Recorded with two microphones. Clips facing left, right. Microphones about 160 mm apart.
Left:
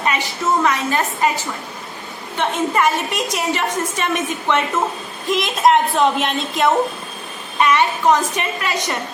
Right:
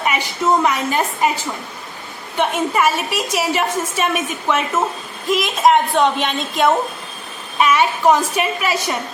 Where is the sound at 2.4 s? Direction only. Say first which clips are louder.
Right 1 dB; 5° right (ahead or behind).